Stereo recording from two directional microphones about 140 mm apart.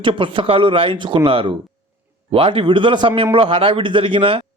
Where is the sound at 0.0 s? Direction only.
40° right (ahead or behind).